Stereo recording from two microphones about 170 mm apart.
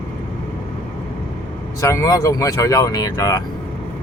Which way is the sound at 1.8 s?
20° left (ahead or behind).